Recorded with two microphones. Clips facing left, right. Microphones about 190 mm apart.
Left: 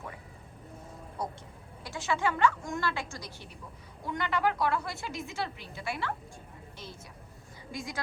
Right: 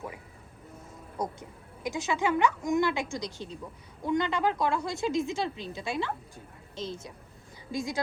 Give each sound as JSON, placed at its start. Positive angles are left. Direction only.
{"t": 1.2, "sound": "a woman's voice", "side_deg": -20}
{"t": 7.7, "sound": "a woman's voice", "side_deg": -90}